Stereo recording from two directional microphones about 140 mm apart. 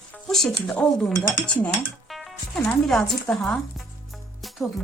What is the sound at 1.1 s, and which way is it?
Speech, 15° left (ahead or behind).